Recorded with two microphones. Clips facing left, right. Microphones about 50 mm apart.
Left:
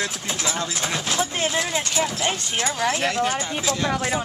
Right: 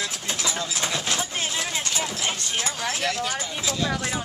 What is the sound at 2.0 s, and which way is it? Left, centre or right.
Speech, centre.